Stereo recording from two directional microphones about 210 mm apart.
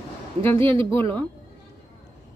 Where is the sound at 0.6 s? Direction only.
25° right (ahead or behind).